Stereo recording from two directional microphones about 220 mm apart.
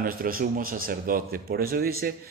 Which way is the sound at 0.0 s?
40° right (ahead or behind).